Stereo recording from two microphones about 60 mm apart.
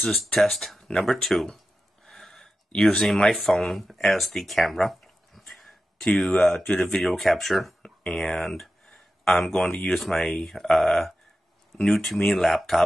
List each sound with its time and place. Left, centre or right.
0.4 s speech: centre
2.0 s a sound: centre
3.3 s speech: centre
3.7 s speech: centre
6.0 s speech: centre
7.8 s a sound: centre
8.2 s speech: centre